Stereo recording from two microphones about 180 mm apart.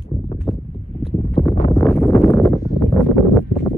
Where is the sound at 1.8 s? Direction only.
5° left (ahead or behind).